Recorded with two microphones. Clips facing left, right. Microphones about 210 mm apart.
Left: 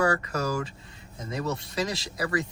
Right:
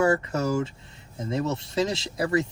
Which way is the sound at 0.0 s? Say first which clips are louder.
Right 3 dB; 25° right (ahead or behind).